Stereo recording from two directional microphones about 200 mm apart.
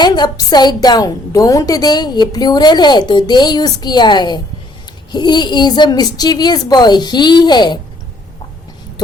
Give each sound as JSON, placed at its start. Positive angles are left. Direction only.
{"t": 0.0, "sound": "a woman's voice", "side_deg": 20}